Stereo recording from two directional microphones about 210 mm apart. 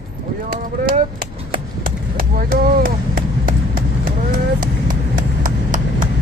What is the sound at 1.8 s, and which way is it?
Chop, 45° right (ahead or behind).